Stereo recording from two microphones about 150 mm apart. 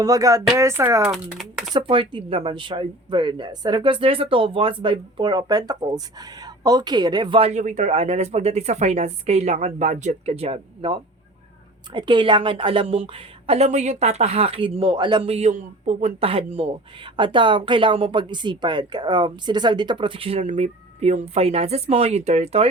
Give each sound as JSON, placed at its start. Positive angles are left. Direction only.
{"t": 0.0, "sound": "speech", "side_deg": -25}
{"t": 1.4, "sound": "speech", "side_deg": 0}
{"t": 1.7, "sound": "a woman's voice", "side_deg": -35}